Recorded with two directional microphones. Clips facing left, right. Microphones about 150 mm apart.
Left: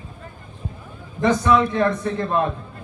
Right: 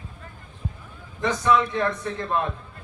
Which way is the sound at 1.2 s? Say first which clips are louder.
Left 4 dB; 35° left (ahead or behind).